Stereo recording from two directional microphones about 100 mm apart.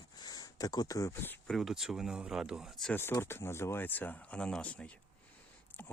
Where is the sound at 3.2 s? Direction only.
25° left (ahead or behind).